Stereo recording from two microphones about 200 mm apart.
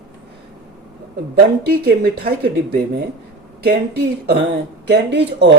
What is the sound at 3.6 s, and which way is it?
Speech, 55° right (ahead or behind).